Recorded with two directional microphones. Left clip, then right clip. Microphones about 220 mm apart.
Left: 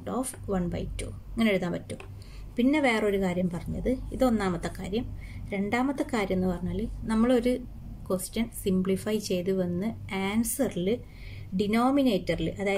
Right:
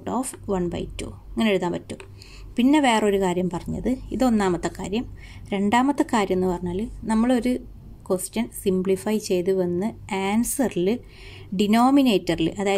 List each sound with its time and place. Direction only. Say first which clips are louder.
0.0 s a woman's voice: right 5 dB; 30° right (ahead or behind)